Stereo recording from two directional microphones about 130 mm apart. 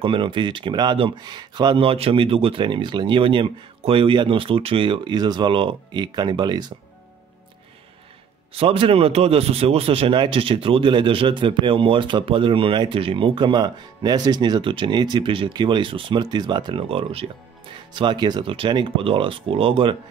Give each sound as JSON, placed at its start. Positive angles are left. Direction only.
{"t": 0.0, "sound": "speech", "side_deg": -40}
{"t": 8.5, "sound": "speech", "side_deg": -45}
{"t": 17.9, "sound": "speech", "side_deg": -35}